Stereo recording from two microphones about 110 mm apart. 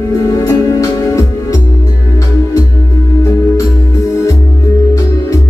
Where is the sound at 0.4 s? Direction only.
30° left (ahead or behind).